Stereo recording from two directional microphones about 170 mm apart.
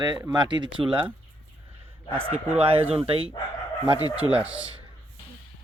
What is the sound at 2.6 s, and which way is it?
Speech, 35° right (ahead or behind).